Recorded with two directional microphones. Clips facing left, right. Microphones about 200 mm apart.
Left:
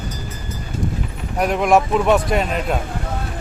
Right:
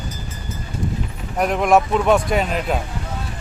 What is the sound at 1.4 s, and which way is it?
Speech, centre (ahead or behind).